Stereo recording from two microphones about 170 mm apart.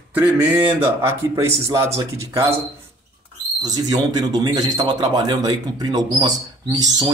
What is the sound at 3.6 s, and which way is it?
Speech, 25° right (ahead or behind).